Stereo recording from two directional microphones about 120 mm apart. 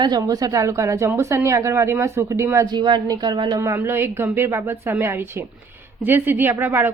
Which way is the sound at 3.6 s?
20° right (ahead or behind).